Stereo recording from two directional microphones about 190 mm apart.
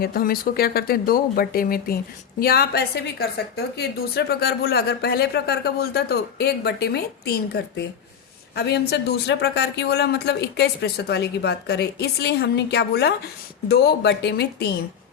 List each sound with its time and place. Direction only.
0.0 s a woman's voice: 50° left (ahead or behind)